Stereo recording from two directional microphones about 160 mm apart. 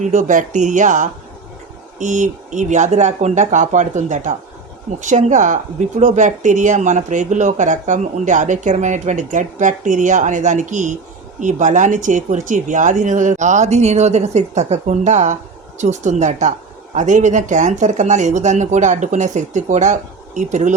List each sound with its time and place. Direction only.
0.0 s speech: 50° right (ahead or behind)